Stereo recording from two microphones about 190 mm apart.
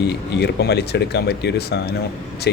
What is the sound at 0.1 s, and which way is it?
Speech, 60° left (ahead or behind).